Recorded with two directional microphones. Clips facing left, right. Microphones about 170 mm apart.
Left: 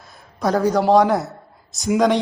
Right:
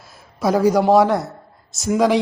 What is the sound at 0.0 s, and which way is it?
A man's voice, 5° right (ahead or behind).